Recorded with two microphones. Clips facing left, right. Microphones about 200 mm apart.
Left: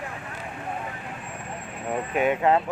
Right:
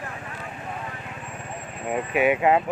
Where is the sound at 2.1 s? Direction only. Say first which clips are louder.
Right 2 dB; 10° right (ahead or behind).